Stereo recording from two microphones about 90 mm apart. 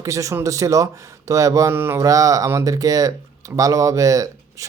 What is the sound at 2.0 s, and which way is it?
A man's voice, 40° right (ahead or behind).